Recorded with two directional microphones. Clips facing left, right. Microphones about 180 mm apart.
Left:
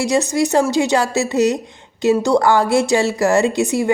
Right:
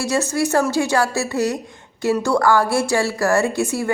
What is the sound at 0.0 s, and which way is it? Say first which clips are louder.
A woman's voice: left 3 dB; 15° left (ahead or behind).